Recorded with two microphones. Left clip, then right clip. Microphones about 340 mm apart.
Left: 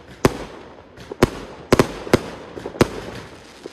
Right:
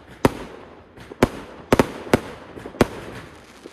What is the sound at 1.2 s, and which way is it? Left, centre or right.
Fireworks, centre.